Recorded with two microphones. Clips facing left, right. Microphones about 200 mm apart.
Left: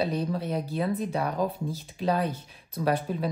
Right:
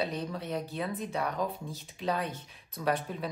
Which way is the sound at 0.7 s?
30° left (ahead or behind).